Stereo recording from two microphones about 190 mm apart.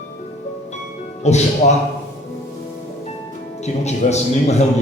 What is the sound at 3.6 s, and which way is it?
A man's voice, 35° left (ahead or behind).